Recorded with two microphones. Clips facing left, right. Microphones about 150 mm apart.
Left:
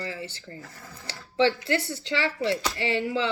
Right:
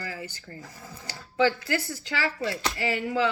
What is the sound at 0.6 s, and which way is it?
Speech, 10° right (ahead or behind).